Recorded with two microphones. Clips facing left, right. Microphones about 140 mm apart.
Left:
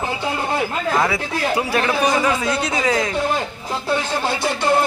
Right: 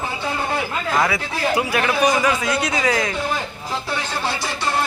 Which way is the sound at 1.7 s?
30° left (ahead or behind).